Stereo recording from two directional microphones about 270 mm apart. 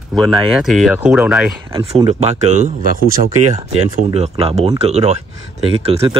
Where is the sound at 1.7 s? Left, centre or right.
Right.